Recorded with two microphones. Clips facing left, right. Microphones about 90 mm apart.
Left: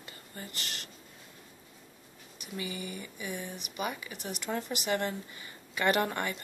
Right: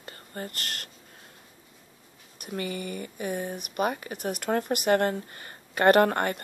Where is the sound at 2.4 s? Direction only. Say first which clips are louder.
Right 6 dB; 55° right (ahead or behind).